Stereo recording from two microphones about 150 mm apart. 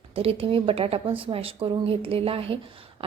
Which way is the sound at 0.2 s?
40° right (ahead or behind).